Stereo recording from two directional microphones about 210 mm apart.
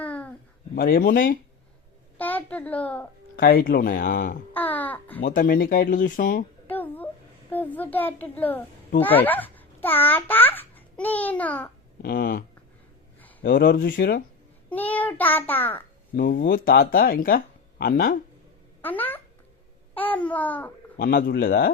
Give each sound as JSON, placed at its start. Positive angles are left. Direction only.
{"t": 0.0, "sound": "babbling", "side_deg": 5}
{"t": 0.8, "sound": "speech", "side_deg": 45}
{"t": 2.1, "sound": "a sound", "side_deg": 10}
{"t": 3.3, "sound": "speech", "side_deg": 45}
{"t": 4.5, "sound": "a child's voice", "side_deg": 10}
{"t": 5.2, "sound": "speech", "side_deg": 40}
{"t": 6.7, "sound": "a sound", "side_deg": 10}
{"t": 7.5, "sound": "a child's voice", "side_deg": 10}
{"t": 12.0, "sound": "speech", "side_deg": 45}
{"t": 13.4, "sound": "speech", "side_deg": 45}
{"t": 14.7, "sound": "a child's voice", "side_deg": 5}
{"t": 16.1, "sound": "speech", "side_deg": 50}
{"t": 18.8, "sound": "a child's voice", "side_deg": 10}
{"t": 21.0, "sound": "speech", "side_deg": 45}